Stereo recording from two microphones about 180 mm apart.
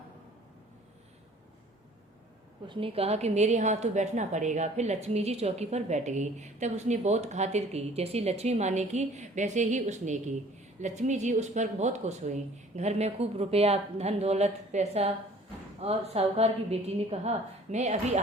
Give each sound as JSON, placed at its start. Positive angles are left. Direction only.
{"t": 2.6, "sound": "a woman's voice", "side_deg": -30}